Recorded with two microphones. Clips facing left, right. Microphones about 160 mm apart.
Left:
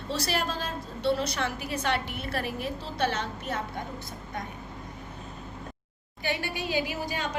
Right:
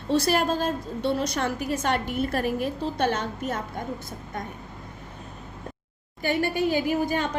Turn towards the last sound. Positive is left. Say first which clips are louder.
# right 6 dB
turn(degrees=-50)  # may be behind; listen again after turning